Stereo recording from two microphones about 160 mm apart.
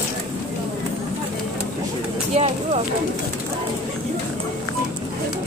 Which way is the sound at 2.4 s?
40° right (ahead or behind).